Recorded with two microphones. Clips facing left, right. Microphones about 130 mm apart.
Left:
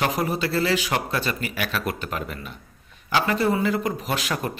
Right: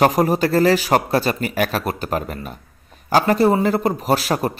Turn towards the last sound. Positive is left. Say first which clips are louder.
# right 8 dB
turn(degrees=-40)  # may be behind; listen again after turning